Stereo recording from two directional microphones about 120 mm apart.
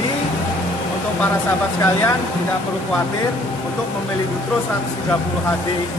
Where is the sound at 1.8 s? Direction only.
20° left (ahead or behind).